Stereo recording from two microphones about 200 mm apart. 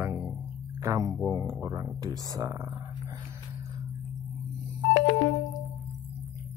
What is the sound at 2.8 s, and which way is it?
Dog, 15° right (ahead or behind).